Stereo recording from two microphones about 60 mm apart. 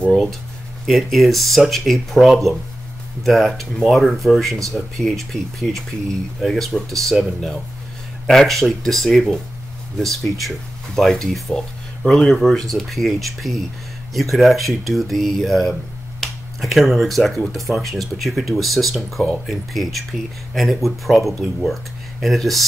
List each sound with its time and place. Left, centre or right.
0.1 s speech: centre
8.3 s speech: centre